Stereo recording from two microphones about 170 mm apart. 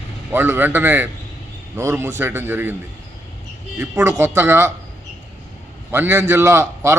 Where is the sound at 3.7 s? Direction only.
15° right (ahead or behind).